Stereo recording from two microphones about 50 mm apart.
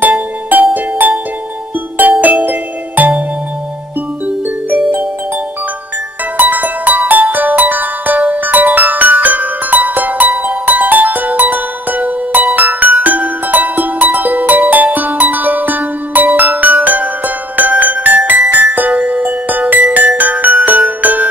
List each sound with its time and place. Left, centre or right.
0.0 s music: right
2.0 s music: right
4.6 s music: right
6.3 s music: right